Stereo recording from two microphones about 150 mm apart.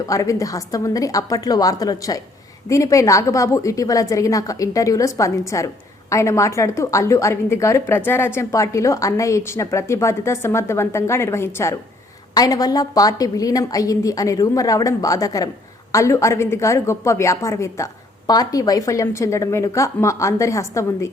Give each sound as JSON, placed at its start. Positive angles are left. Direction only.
{"t": 0.0, "sound": "a woman's voice", "side_deg": 20}